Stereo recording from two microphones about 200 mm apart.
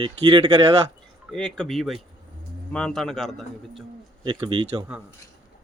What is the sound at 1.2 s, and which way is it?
Speech, 5° left (ahead or behind).